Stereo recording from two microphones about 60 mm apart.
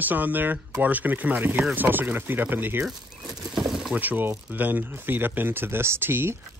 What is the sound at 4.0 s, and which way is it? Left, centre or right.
Speech, right.